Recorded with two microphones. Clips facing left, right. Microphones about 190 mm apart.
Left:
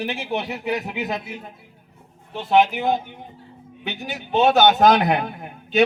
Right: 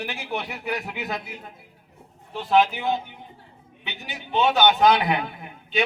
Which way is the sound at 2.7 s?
40° left (ahead or behind).